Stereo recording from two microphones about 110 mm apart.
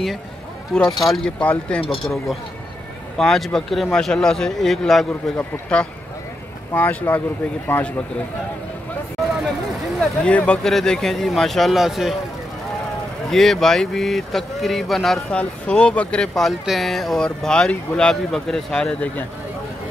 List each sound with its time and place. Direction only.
0.7 s speech: 5° left (ahead or behind)
1.4 s speech: 10° left (ahead or behind)
3.2 s speech: 5° left (ahead or behind)
9.9 s speech: 10° left (ahead or behind)
13.3 s speech: centre (ahead or behind)